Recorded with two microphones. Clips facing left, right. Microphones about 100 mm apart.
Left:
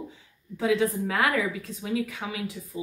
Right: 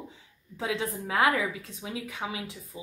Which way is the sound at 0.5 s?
20° right (ahead or behind).